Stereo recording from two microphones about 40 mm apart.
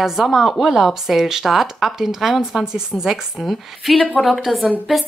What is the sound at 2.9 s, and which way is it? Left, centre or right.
Speech, centre.